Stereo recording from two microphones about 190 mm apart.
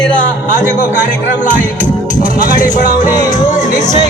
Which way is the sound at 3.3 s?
40° left (ahead or behind).